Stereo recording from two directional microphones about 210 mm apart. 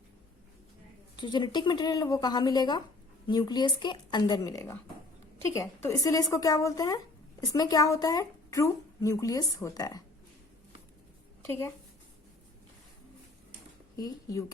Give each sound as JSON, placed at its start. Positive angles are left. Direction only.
{"t": 1.2, "sound": "speech", "side_deg": 20}
{"t": 11.4, "sound": "a woman's voice", "side_deg": 10}
{"t": 13.9, "sound": "speech", "side_deg": 15}